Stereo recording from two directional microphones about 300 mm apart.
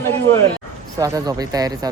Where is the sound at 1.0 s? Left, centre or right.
Centre.